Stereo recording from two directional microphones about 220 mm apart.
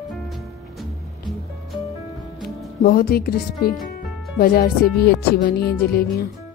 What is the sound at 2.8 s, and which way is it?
Music, 45° left (ahead or behind).